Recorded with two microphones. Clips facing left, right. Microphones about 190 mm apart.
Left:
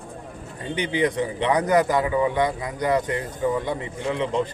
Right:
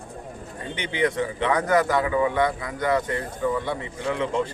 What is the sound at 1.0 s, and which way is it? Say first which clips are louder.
A man's voice: right 1 dB; 20° left (ahead or behind).